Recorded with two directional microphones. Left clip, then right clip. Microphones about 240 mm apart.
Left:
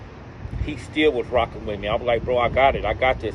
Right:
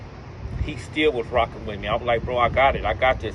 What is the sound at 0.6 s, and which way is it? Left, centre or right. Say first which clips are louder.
Speech: left 2 dB; left.